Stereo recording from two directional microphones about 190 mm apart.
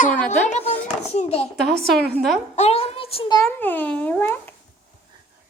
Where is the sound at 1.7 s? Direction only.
Centre (ahead or behind).